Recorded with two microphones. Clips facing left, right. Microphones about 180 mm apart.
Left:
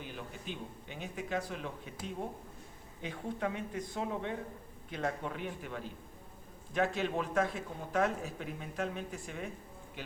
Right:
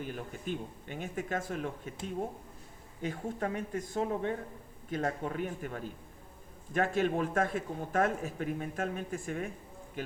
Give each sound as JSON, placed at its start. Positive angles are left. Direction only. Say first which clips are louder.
{"t": 0.0, "sound": "speech", "louder": "right 5 dB", "side_deg": -45}
{"t": 3.0, "sound": "speech", "louder": "right 2 dB", "side_deg": -45}